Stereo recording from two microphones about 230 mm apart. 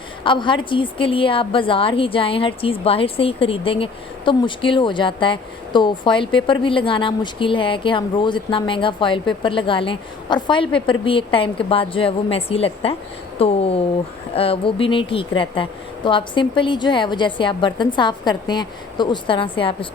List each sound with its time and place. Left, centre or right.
0.3 s a woman's voice: left